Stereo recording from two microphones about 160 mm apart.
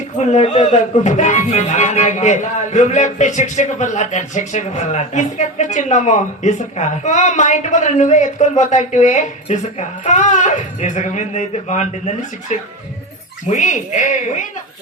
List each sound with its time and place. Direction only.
0.2 s speech: 45° left (ahead or behind)